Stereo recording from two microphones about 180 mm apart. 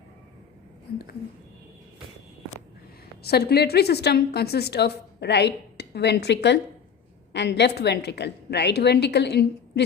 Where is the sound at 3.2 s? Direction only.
60° left (ahead or behind).